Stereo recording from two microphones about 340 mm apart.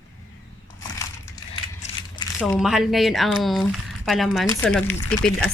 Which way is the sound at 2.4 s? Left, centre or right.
Centre.